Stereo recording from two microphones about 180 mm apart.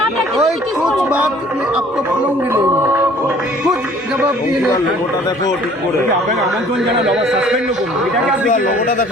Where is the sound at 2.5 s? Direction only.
15° right (ahead or behind).